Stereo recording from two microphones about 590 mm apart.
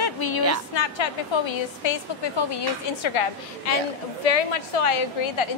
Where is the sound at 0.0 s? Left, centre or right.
Left.